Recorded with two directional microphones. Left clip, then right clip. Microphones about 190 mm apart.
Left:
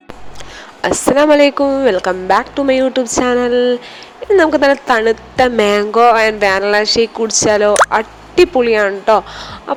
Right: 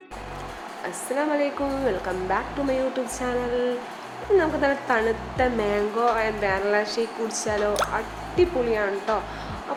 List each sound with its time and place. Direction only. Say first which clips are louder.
0.8 s a woman's voice: left 16 dB; 50° left (ahead or behind)